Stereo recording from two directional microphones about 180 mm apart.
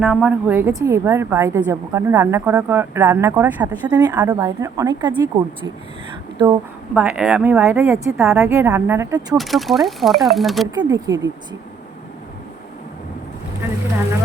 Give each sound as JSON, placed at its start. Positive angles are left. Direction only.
{"t": 0.0, "sound": "a woman's voice", "side_deg": -5}
{"t": 6.9, "sound": "a woman's voice", "side_deg": -10}
{"t": 8.4, "sound": "a woman's voice", "side_deg": -15}
{"t": 9.4, "sound": "speech", "side_deg": 0}
{"t": 10.8, "sound": "speech", "side_deg": -20}